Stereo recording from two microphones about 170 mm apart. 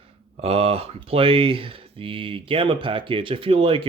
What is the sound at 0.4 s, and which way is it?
Speech, 35° right (ahead or behind).